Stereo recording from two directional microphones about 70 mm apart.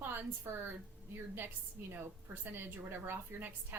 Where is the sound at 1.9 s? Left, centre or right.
Right.